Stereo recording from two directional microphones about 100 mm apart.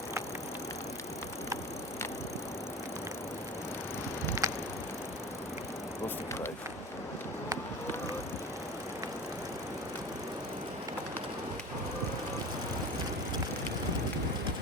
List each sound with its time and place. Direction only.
4.4 s bicycle: 35° right (ahead or behind)